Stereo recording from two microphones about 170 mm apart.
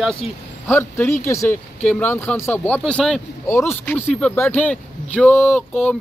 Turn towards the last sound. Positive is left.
turn(degrees=10)  # may be behind; listen again after turning